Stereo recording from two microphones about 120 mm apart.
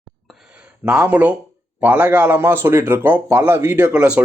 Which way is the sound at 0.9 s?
10° right (ahead or behind).